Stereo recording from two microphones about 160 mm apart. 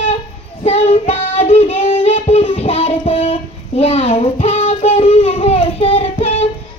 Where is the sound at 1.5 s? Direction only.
40° left (ahead or behind).